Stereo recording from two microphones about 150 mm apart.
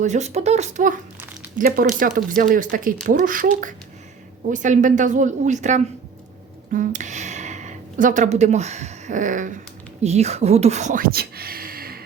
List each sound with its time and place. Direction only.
0.0 s speech: 50° right (ahead or behind)
1.5 s speech: 70° right (ahead or behind)
10.0 s speech: 45° right (ahead or behind); by 12.0 s 85° right